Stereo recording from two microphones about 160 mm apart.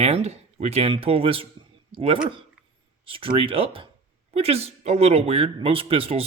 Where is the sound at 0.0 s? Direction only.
40° right (ahead or behind).